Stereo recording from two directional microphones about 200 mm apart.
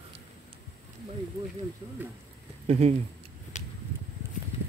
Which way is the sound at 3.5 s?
35° left (ahead or behind).